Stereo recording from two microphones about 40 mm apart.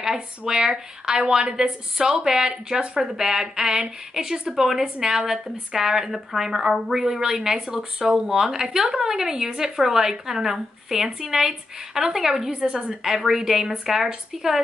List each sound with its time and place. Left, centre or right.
0.5 s speech: centre
4.8 s a woman's voice: right
12.5 s a woman's voice: right
13.0 s speech: centre